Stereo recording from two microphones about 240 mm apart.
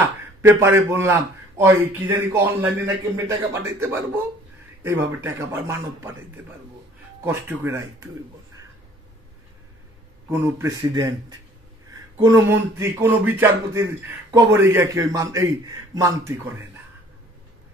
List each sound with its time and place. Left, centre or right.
0.0 s speech: centre
10.3 s speech: centre